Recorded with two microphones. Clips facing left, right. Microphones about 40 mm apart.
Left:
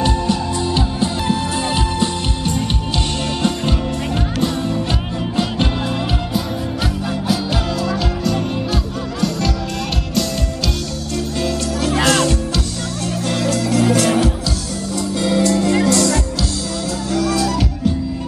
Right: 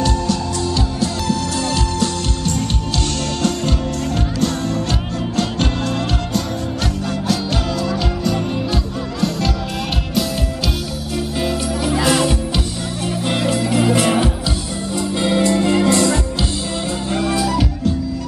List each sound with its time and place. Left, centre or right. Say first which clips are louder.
0.0 s music: left 1 dB; left
7.8 s music: even; centre
12.1 s music: even; centre
17.4 s music: even; centre